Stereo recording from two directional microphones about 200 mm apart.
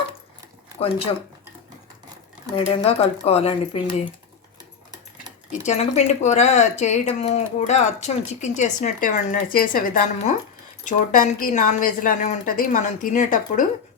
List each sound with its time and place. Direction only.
2.6 s speech: 30° left (ahead or behind)
5.5 s a woman's voice: 35° left (ahead or behind)